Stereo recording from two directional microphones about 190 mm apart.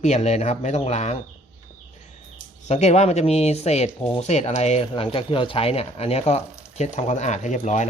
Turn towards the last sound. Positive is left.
turn(degrees=35)  # may be behind; listen again after turning